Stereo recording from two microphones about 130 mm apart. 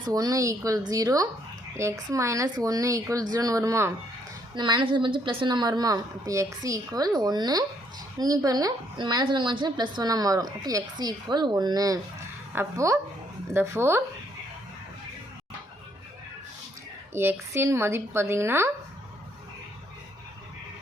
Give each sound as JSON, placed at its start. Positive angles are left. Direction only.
{"t": 0.1, "sound": "speech", "side_deg": -25}
{"t": 4.5, "sound": "a woman's voice", "side_deg": -35}
{"t": 17.2, "sound": "speech", "side_deg": -20}